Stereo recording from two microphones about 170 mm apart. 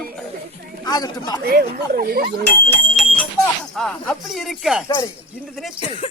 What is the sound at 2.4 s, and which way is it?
A man's voice, 10° left (ahead or behind).